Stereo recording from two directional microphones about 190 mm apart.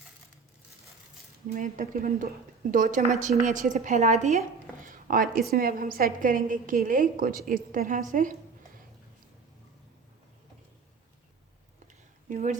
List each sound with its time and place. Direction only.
1.5 s a woman's voice: 45° right (ahead or behind)
12.3 s a woman's voice: 45° right (ahead or behind)